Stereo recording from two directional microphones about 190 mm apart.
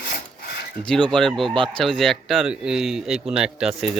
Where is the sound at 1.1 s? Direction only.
Centre (ahead or behind).